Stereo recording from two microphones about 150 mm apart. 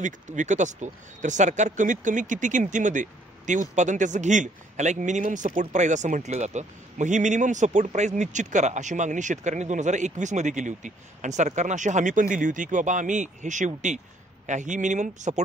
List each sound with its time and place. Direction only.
0.0 s speech: 55° right (ahead or behind)